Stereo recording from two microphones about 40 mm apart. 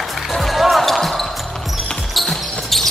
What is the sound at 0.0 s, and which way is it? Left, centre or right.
Music, centre.